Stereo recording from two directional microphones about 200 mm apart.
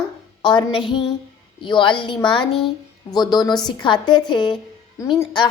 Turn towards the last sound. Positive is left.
turn(degrees=20)  # may be behind; listen again after turning